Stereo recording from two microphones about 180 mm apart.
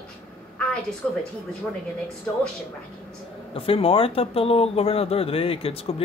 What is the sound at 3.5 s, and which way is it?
Speech, 30° left (ahead or behind).